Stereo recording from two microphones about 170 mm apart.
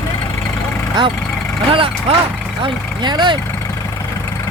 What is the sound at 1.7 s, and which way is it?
Speech, 30° right (ahead or behind).